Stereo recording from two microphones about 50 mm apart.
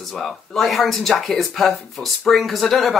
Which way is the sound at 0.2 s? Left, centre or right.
Centre.